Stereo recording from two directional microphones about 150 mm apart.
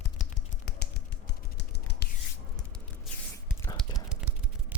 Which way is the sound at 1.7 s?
90° left.